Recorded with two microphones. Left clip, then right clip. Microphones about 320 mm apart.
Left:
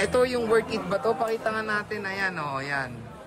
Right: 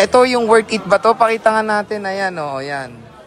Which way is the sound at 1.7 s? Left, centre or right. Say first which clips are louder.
Right 10 dB; centre.